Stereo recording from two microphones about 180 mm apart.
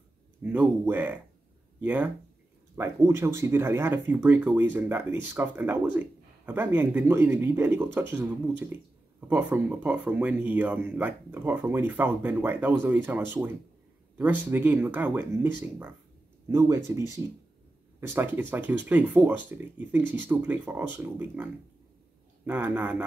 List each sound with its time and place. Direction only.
0.4 s speech: 10° right (ahead or behind)
18.0 s speech: 10° right (ahead or behind)